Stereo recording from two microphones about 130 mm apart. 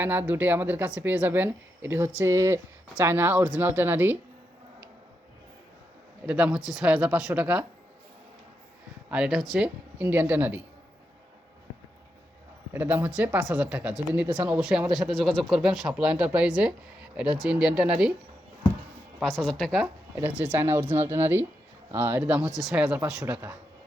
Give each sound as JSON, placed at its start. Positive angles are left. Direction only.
{"t": 0.0, "sound": "speech", "side_deg": -15}
{"t": 6.2, "sound": "speech", "side_deg": -10}
{"t": 9.0, "sound": "speech", "side_deg": -5}
{"t": 12.7, "sound": "speech", "side_deg": -15}
{"t": 19.2, "sound": "speech", "side_deg": 5}
{"t": 20.2, "sound": "speech", "side_deg": -10}